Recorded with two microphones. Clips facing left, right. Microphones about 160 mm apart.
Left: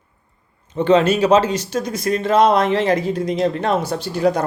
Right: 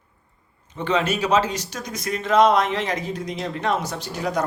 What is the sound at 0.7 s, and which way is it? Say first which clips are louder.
Speech: left 8 dB; 30° left (ahead or behind).